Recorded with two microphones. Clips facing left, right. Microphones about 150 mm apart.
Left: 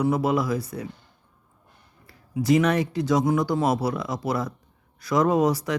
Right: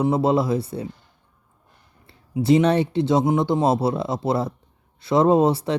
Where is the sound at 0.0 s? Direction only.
25° right (ahead or behind).